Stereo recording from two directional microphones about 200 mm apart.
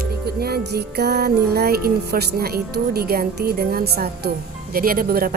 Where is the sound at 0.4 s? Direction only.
55° right (ahead or behind).